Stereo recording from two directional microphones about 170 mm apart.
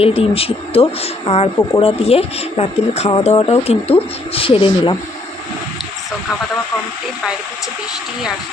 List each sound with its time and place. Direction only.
0.0 s speech: 35° left (ahead or behind)